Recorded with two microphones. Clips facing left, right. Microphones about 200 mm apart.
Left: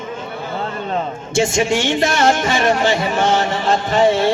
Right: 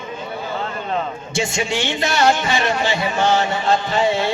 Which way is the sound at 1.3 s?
45° left (ahead or behind).